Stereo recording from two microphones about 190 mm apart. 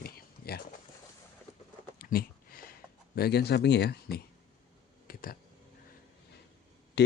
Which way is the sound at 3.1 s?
55° left (ahead or behind).